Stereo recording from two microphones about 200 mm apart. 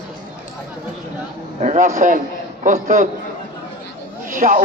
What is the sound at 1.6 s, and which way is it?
A man's voice, 40° right (ahead or behind).